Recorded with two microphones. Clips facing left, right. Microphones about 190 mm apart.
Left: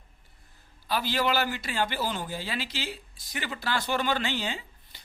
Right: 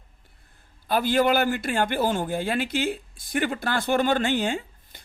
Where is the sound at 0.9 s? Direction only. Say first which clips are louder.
Right 7 dB; 50° right (ahead or behind).